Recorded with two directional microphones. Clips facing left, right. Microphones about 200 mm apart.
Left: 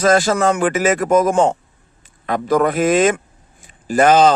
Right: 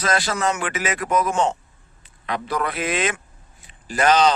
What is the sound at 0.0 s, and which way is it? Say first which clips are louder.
A man's voice: left 8 dB; 45° left (ahead or behind).